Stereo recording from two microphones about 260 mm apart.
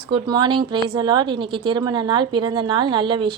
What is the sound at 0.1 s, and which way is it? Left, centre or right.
A woman's voice, centre.